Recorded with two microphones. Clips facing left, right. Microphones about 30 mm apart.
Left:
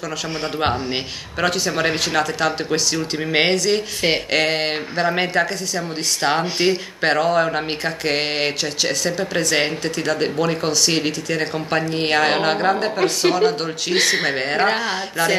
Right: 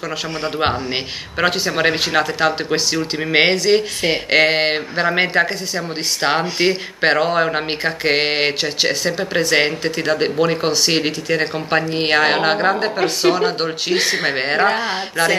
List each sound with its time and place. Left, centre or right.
1.4 s speech: centre